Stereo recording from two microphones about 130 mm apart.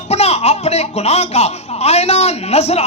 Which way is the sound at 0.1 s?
55° left (ahead or behind).